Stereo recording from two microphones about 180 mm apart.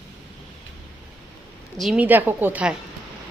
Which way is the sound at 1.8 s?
5° right (ahead or behind).